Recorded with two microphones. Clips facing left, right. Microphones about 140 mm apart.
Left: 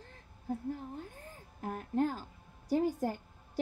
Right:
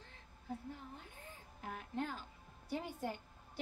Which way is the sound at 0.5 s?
45° left (ahead or behind).